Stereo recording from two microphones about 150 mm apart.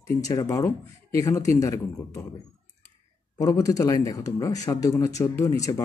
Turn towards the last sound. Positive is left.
turn(degrees=20)  # may be behind; listen again after turning